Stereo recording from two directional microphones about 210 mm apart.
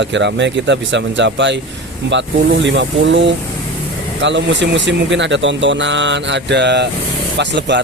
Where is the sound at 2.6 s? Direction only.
60° right (ahead or behind).